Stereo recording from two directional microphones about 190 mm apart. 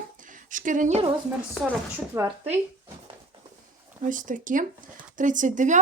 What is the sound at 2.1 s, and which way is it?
Speech, 15° right (ahead or behind).